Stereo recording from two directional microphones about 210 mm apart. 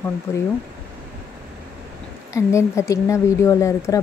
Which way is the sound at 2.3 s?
15° left (ahead or behind).